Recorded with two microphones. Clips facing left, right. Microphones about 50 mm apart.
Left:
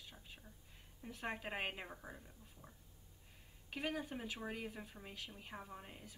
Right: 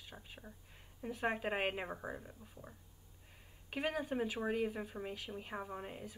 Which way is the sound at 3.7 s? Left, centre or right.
Right.